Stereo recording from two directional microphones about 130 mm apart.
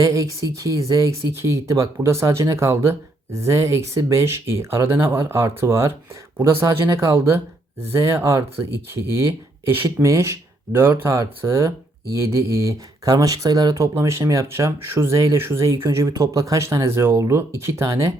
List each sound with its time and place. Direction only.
0.0 s speech: 25° right (ahead or behind)